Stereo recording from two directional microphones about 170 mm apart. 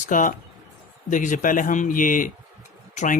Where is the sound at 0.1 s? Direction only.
50° left (ahead or behind).